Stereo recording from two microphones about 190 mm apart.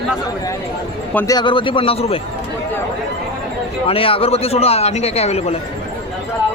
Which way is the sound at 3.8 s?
30° left (ahead or behind).